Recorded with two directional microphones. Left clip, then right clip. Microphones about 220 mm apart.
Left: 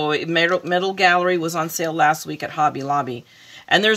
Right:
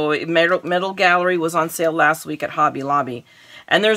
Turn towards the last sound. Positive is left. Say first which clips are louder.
# right 1 dB
turn(degrees=-15)  # may be behind; listen again after turning